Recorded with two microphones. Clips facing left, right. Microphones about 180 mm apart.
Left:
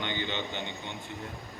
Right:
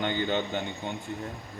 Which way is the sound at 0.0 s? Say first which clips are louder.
Right 6 dB; 45° right (ahead or behind).